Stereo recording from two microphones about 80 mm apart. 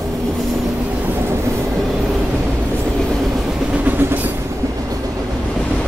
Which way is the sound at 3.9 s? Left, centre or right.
Right.